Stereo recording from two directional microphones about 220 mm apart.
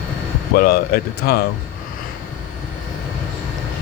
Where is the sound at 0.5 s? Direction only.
40° left (ahead or behind).